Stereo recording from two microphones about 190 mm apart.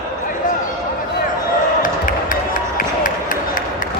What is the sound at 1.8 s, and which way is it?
Music, 45° left (ahead or behind).